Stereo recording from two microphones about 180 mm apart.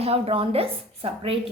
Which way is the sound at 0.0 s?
35° right (ahead or behind).